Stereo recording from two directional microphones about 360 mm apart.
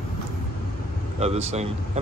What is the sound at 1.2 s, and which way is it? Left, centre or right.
Speech, centre.